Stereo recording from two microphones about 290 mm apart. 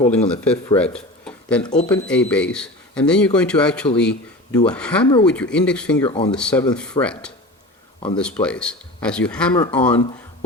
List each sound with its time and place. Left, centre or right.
0.0 s speech: centre
1.6 s speech: left
1.9 s a man's voice: centre
6.1 s speech: centre
6.3 s a man's voice: centre